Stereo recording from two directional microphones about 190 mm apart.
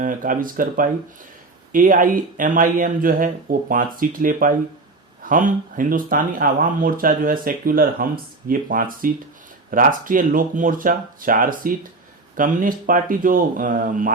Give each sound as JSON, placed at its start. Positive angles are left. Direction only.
{"t": 0.0, "sound": "speech", "side_deg": -45}